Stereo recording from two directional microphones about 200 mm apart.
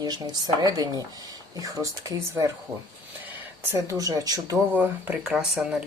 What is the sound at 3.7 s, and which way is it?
Speech, 15° right (ahead or behind).